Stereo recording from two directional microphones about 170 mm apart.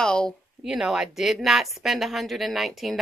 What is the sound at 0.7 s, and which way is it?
Speech, 5° right (ahead or behind).